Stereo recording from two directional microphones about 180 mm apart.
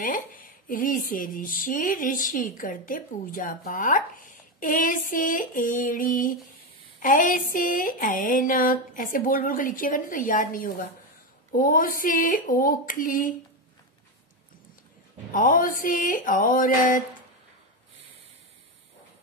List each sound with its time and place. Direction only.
0.0 s speech: 50° left (ahead or behind)
15.3 s speech: 50° left (ahead or behind)